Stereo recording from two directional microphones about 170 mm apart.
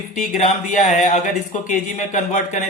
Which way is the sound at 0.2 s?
45° left (ahead or behind).